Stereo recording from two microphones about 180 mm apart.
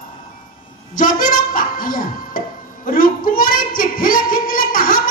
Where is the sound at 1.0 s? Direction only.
50° left (ahead or behind).